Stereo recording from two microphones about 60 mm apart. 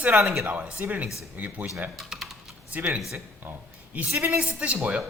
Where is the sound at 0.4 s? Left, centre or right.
Right.